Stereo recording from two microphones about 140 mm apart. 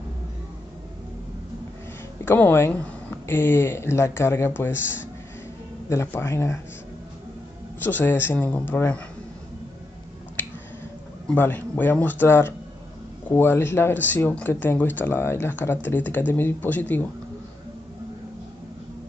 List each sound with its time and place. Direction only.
2.2 s speech: 15° left (ahead or behind)
5.9 s a man's voice: 20° left (ahead or behind)
7.8 s speech: 15° left (ahead or behind)
10.4 s finger snapping: 15° left (ahead or behind)
11.2 s speech: 15° left (ahead or behind)